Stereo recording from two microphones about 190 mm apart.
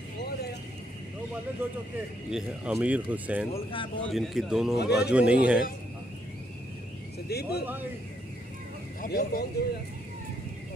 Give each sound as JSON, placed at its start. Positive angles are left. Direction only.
{"t": 2.3, "sound": "speech", "side_deg": -5}
{"t": 3.5, "sound": "speech", "side_deg": 25}
{"t": 4.1, "sound": "a man's voice", "side_deg": 0}
{"t": 7.2, "sound": "speech", "side_deg": 55}
{"t": 9.0, "sound": "speech", "side_deg": 50}